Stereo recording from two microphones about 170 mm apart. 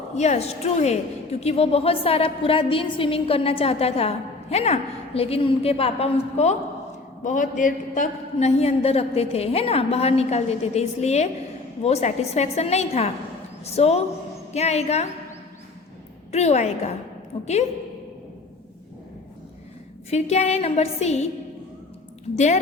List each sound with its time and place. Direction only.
0.2 s a woman's voice: 40° left (ahead or behind)
16.3 s a woman's voice: 40° left (ahead or behind)
20.1 s a woman's voice: 40° left (ahead or behind)
22.4 s a woman's voice: 45° left (ahead or behind)